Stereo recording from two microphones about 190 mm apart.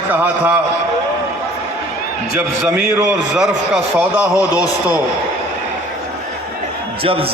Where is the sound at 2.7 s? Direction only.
5° right (ahead or behind).